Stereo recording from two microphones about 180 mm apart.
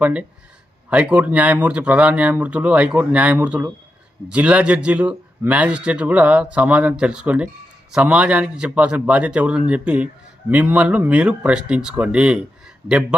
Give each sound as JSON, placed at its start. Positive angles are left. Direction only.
{"t": 0.0, "sound": "speech", "side_deg": -10}